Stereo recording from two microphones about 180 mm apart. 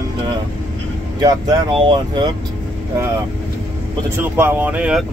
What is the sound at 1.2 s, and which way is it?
Speech, 20° right (ahead or behind).